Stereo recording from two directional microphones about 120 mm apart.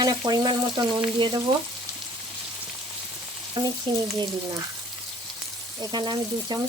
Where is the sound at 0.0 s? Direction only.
35° right (ahead or behind).